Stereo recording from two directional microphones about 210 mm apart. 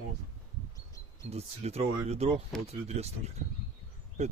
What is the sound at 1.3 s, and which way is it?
Speech, 30° right (ahead or behind).